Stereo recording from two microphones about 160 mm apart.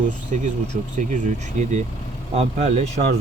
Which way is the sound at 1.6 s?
50° right (ahead or behind).